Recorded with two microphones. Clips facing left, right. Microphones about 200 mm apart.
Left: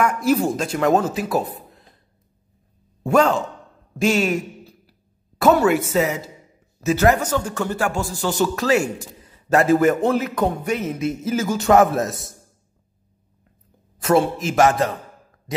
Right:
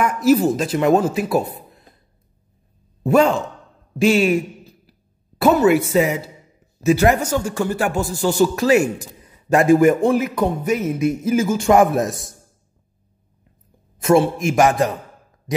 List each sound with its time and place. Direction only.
0.0 s speech: 5° right (ahead or behind)
3.0 s a man's voice: 5° right (ahead or behind)
5.7 s a man's voice: 10° right (ahead or behind)
14.1 s a man's voice: 15° right (ahead or behind)